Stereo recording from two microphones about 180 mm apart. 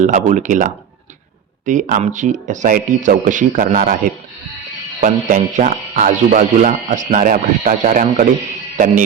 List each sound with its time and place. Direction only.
0.0 s speech: 45° right (ahead or behind)